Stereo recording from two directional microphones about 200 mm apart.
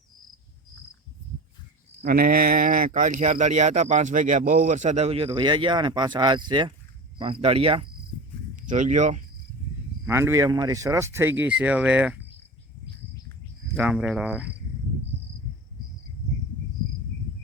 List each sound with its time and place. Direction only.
2.0 s speech: 45° right (ahead or behind); by 7.9 s 30° right (ahead or behind)
8.5 s speech: 40° right (ahead or behind)
10.1 s speech: 15° right (ahead or behind)
13.7 s speech: 5° right (ahead or behind)